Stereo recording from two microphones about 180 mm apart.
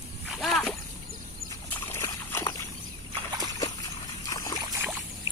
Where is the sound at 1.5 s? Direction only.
15° left (ahead or behind).